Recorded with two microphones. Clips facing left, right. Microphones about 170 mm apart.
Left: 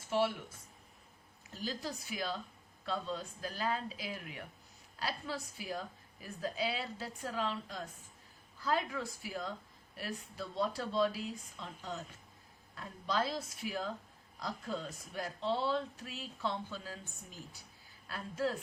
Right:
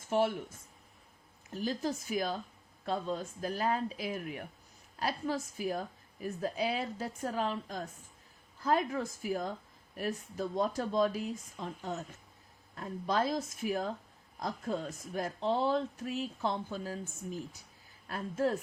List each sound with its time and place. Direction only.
0.1 s a woman's voice: 50° right (ahead or behind)
1.5 s a woman's voice: 45° right (ahead or behind)
13.1 s a woman's voice: 45° right (ahead or behind)
18.1 s a woman's voice: 45° right (ahead or behind)